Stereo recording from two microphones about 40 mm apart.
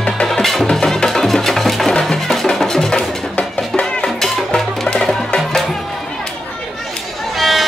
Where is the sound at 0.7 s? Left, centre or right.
Centre.